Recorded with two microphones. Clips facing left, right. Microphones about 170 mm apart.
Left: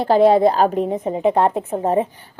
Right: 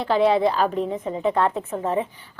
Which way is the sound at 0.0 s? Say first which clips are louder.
Left 6 dB; 45° left (ahead or behind).